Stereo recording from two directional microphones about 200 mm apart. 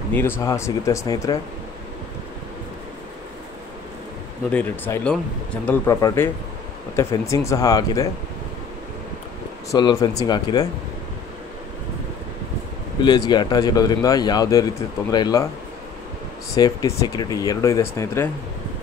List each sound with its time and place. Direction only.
0.1 s speech: 10° left (ahead or behind)
4.5 s speech: 10° left (ahead or behind)
9.7 s speech: 20° left (ahead or behind)
13.0 s speech: 20° left (ahead or behind)
16.5 s speech: 15° left (ahead or behind)